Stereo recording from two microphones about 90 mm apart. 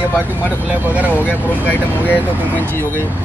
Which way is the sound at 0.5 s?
15° right (ahead or behind).